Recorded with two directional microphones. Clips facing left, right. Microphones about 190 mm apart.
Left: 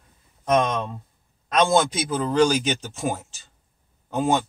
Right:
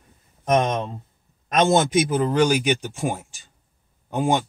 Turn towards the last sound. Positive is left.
turn(degrees=-15)  # may be behind; listen again after turning